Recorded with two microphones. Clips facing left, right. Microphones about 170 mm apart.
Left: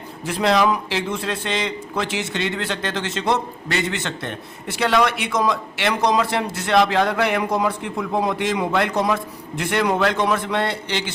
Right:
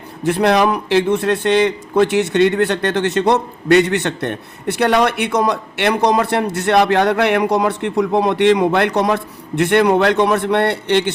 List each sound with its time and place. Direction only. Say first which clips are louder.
0.3 s a man's voice: right 4 dB; 60° right (ahead or behind)